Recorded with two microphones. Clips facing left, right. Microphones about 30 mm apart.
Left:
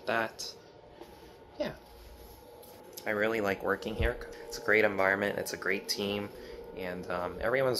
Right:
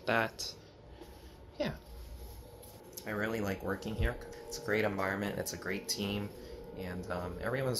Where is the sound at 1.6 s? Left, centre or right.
Centre.